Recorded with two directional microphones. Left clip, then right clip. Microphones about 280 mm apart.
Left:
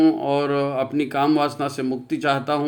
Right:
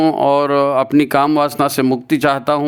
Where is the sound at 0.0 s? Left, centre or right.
Right.